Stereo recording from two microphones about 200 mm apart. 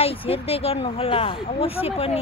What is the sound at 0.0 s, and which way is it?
Speech, 30° left (ahead or behind).